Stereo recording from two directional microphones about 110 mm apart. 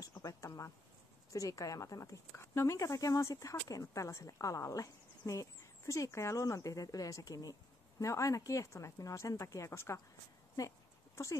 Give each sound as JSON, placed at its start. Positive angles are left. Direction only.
{"t": 0.2, "sound": "speech", "side_deg": 30}